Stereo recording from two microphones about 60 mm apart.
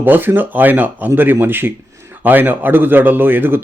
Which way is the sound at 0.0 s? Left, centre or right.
Right.